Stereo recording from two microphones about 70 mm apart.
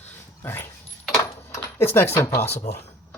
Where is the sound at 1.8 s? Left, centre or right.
Left.